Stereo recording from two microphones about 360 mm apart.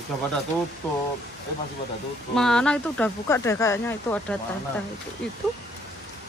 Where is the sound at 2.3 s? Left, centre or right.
Centre.